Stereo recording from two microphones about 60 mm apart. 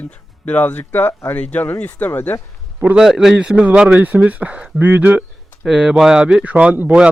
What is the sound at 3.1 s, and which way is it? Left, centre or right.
Speech, centre.